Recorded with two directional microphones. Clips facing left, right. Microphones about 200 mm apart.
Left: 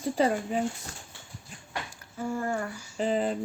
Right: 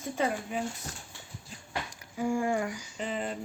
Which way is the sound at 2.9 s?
35° left (ahead or behind).